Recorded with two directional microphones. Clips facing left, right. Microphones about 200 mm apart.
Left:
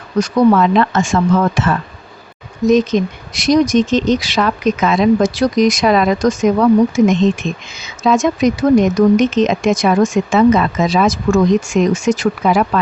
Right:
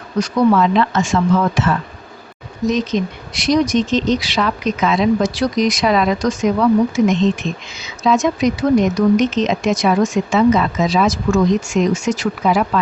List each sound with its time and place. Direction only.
0.2 s speech: 50° left (ahead or behind)